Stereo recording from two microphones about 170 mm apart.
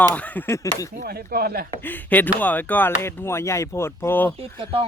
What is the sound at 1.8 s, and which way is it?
Speech, 10° left (ahead or behind).